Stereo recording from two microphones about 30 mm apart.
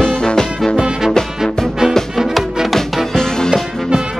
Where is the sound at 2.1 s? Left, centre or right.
Centre.